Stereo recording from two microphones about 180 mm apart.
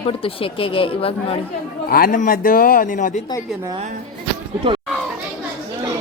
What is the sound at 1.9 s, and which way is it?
A man's voice, 55° left (ahead or behind).